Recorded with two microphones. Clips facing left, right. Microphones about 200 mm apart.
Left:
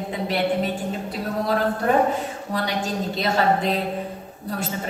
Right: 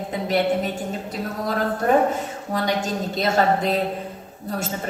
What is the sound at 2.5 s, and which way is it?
A woman's voice, 45° right (ahead or behind).